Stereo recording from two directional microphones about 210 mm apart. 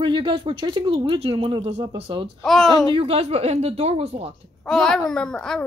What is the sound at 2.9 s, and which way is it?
A woman's voice, 30° right (ahead or behind).